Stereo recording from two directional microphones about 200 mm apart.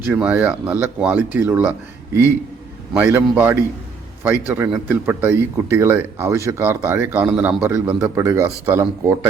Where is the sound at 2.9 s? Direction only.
10° right (ahead or behind).